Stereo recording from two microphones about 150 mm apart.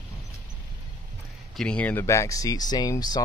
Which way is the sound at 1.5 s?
5° left (ahead or behind).